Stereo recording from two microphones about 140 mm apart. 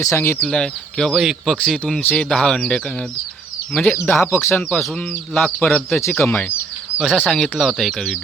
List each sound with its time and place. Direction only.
0.0 s speech: 20° left (ahead or behind)
0.4 s speech: 5° left (ahead or behind)
4.0 s speech: 15° left (ahead or behind)
4.7 s speech: 5° left (ahead or behind)
7.0 s speech: centre (ahead or behind)